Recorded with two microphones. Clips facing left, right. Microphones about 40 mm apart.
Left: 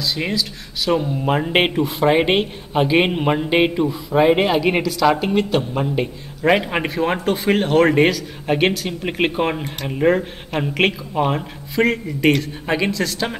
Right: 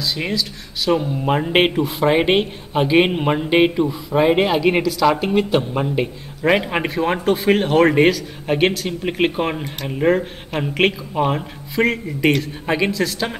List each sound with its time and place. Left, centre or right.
0.0 s speech: centre